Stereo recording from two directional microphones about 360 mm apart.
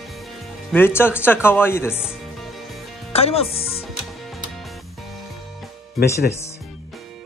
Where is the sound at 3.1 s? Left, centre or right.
Centre.